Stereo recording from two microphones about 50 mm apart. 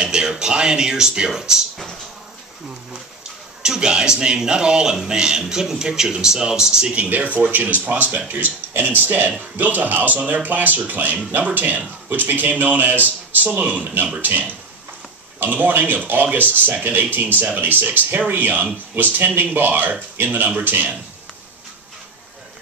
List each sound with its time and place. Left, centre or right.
0.0 s speech: centre
3.6 s speech: centre
7.0 s speech: right